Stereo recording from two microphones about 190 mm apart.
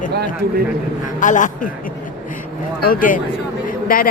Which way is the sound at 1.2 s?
40° left (ahead or behind).